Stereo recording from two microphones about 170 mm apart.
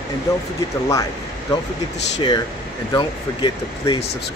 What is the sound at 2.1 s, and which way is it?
Speech, 25° left (ahead or behind).